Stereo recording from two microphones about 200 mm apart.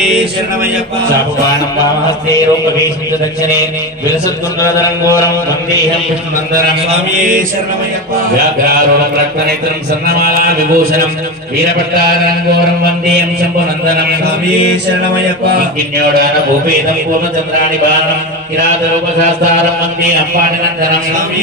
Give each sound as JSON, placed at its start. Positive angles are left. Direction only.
{"t": 10.1, "sound": "speech", "side_deg": -50}